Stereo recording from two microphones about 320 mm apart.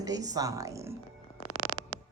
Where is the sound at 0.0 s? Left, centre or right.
Centre.